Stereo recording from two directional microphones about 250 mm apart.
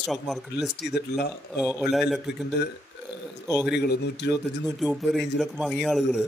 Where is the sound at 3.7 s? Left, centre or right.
Left.